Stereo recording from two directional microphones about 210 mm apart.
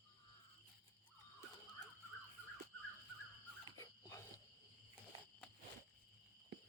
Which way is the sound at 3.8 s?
15° left (ahead or behind).